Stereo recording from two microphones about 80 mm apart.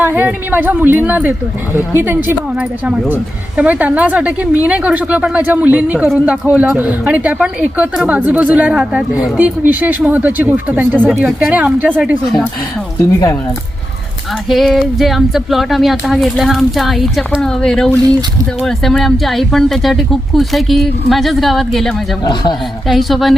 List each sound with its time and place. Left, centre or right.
0.0 s speech: right
13.0 s speech: left
14.5 s a woman's voice: centre
22.2 s speech: left
22.9 s speech: centre